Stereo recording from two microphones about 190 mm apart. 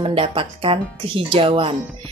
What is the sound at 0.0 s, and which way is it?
Speech, 30° right (ahead or behind).